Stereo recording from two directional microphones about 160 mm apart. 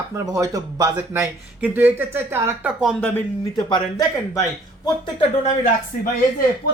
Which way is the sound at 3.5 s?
20° left (ahead or behind).